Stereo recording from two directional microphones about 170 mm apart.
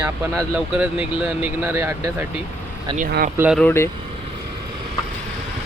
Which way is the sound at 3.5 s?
10° left (ahead or behind).